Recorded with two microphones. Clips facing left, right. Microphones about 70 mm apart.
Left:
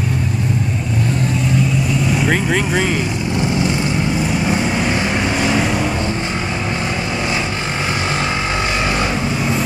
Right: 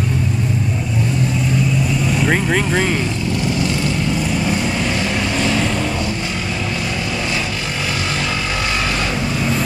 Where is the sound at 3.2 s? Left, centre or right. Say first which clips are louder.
Left 3 dB; left.